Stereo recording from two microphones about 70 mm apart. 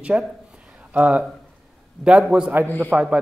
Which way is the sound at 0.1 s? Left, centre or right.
Centre.